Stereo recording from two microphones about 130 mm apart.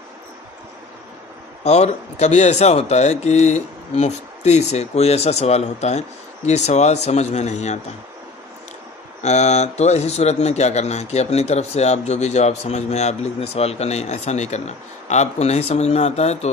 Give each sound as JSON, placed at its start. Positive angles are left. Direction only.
{"t": 1.6, "sound": "speech", "side_deg": 60}
{"t": 9.2, "sound": "speech", "side_deg": 60}